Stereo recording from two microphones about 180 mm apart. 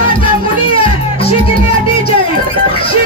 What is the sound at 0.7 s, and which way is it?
Music, 30° left (ahead or behind).